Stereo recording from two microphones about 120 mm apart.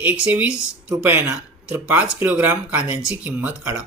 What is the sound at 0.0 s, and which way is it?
Speech, 15° right (ahead or behind).